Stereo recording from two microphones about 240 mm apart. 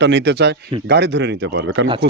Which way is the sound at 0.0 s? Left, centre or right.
Right.